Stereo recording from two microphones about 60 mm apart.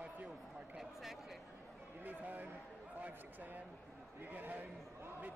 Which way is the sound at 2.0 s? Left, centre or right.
Right.